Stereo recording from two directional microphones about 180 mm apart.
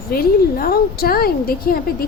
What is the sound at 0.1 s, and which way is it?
A woman's voice, 55° left (ahead or behind).